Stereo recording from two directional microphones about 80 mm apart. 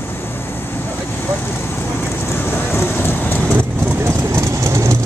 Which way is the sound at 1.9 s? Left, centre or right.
Left.